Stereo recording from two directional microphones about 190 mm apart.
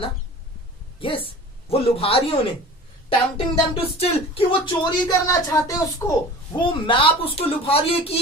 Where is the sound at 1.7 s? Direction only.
30° left (ahead or behind); by 6.2 s 15° left (ahead or behind).